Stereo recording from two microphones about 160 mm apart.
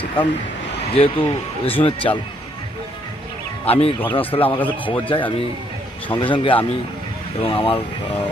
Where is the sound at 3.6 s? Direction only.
40° left (ahead or behind).